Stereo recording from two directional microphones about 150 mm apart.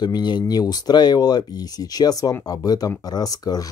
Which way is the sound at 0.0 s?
30° left (ahead or behind).